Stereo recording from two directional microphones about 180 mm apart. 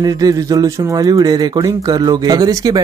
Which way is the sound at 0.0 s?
20° right (ahead or behind).